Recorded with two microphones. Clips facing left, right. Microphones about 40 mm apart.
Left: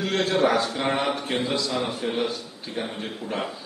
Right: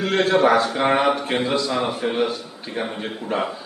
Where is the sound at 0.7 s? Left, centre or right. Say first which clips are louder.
Right 6 dB; centre.